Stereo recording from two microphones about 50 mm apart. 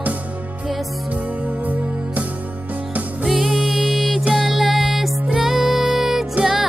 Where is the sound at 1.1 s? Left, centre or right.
Right.